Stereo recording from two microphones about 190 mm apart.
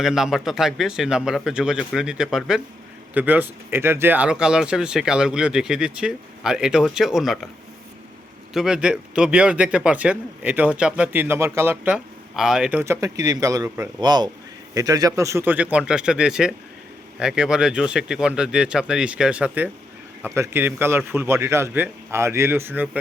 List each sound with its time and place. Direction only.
0.0 s speech: centre (ahead or behind)
8.5 s a man's voice: 5° right (ahead or behind)
12.8 s a man's voice: 15° right (ahead or behind)